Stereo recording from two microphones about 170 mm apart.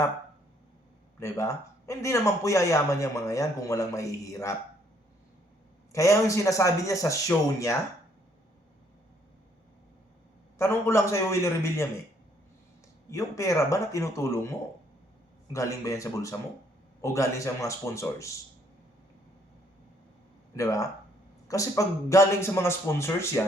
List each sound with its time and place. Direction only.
1.2 s a man's voice: 15° left (ahead or behind)
5.9 s speech: 20° left (ahead or behind)
10.6 s a man's voice: 15° left (ahead or behind)
13.1 s speech: 20° left (ahead or behind)
15.5 s a man's voice: 20° left (ahead or behind)
20.6 s a man's voice: 20° left (ahead or behind)